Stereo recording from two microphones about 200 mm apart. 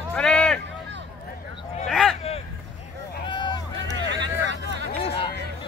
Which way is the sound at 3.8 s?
65° right (ahead or behind).